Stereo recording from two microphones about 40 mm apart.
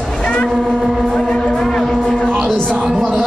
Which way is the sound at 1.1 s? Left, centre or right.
Centre.